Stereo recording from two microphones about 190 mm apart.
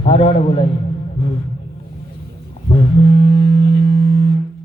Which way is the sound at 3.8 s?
30° left (ahead or behind).